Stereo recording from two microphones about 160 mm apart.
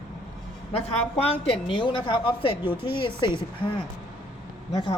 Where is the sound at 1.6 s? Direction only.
30° left (ahead or behind).